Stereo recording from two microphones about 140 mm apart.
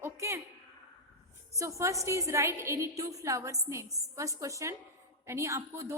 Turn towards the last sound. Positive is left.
turn(degrees=-20)  # may be behind; listen again after turning